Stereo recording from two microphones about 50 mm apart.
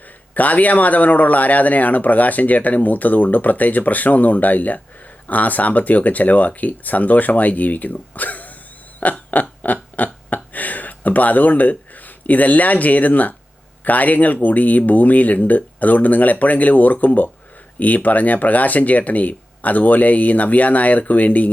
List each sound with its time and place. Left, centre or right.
0.3 s speech: left
9.0 s a sound: left
13.8 s speech: left